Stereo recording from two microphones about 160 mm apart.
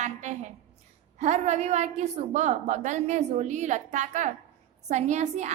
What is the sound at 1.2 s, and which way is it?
A woman's voice, 45° right (ahead or behind).